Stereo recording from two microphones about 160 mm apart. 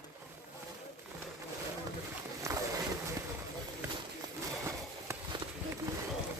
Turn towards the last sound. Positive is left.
turn(degrees=-20)  # may be behind; listen again after turning